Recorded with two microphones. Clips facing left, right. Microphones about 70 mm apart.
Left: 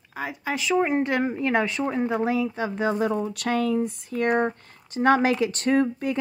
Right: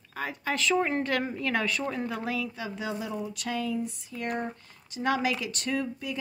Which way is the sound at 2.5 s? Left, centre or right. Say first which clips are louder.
Left 9 dB; left.